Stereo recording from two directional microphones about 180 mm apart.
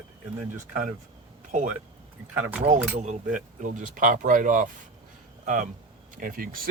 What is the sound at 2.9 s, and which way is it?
Speech, 45° right (ahead or behind).